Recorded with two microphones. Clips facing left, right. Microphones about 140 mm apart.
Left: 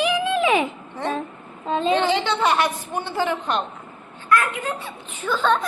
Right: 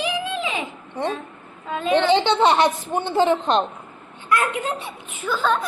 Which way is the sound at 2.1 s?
25° right (ahead or behind).